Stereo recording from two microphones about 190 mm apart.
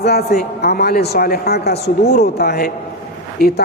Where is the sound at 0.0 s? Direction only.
55° left (ahead or behind).